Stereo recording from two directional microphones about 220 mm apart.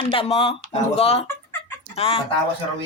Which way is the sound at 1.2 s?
10° left (ahead or behind).